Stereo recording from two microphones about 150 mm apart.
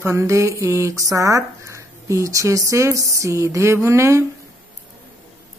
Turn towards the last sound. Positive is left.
turn(degrees=-20)  # may be behind; listen again after turning